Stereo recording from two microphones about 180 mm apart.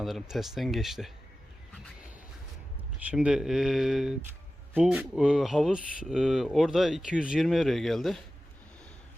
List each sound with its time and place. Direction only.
0.0 s speech: centre (ahead or behind)
3.1 s speech: 5° right (ahead or behind)